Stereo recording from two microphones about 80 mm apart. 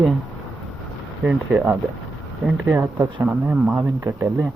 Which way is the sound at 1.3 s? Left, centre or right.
Centre.